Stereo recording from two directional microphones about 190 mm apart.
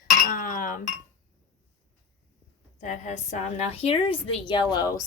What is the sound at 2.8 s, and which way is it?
A woman's voice, 40° left (ahead or behind).